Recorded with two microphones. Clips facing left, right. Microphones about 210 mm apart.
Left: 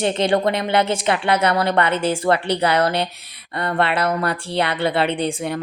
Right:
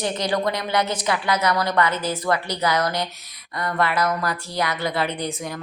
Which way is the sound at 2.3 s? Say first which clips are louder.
Left 4 dB; 65° left (ahead or behind).